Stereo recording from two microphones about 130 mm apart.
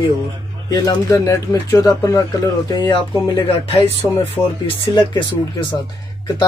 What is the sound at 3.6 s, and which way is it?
Speech, 50° left (ahead or behind).